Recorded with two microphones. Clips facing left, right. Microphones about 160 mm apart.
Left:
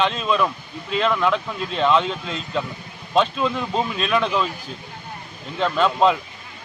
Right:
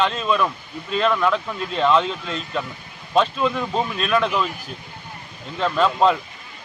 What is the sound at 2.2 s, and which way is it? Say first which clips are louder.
Speech: left 1 dB; 10° left (ahead or behind).